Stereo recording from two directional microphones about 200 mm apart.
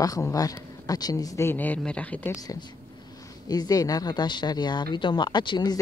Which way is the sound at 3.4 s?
20° left (ahead or behind).